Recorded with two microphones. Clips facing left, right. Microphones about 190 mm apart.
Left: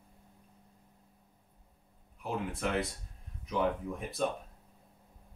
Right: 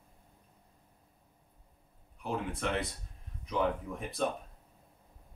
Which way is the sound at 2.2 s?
Centre (ahead or behind).